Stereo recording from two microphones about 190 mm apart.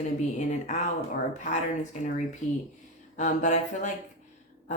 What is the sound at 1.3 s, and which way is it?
Speech, 40° left (ahead or behind).